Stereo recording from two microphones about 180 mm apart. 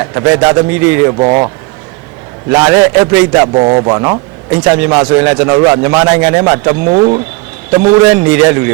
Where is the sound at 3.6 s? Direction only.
30° right (ahead or behind).